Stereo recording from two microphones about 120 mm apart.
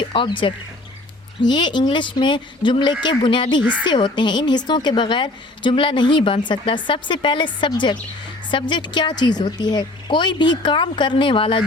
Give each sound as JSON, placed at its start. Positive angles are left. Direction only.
{"t": 0.0, "sound": "a woman's voice", "side_deg": 45}